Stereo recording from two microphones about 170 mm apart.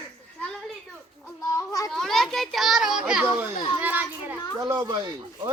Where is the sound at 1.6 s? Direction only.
20° left (ahead or behind).